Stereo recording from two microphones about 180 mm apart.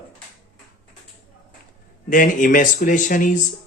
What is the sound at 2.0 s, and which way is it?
Speech, 45° left (ahead or behind).